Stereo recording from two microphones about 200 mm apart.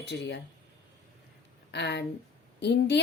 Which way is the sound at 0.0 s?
60° left (ahead or behind).